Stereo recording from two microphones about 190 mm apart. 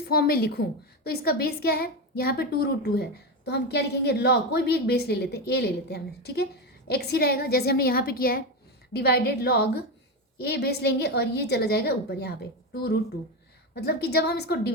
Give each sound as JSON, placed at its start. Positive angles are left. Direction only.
{"t": 0.1, "sound": "a woman's voice", "side_deg": 55}
{"t": 13.7, "sound": "a woman's voice", "side_deg": 60}